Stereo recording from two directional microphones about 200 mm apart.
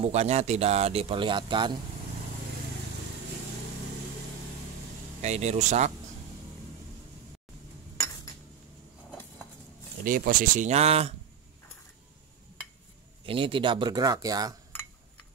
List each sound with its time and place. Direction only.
0.0 s speech: 30° right (ahead or behind)
5.2 s speech: 35° right (ahead or behind)
10.0 s speech: 45° right (ahead or behind)
13.2 s speech: 25° right (ahead or behind)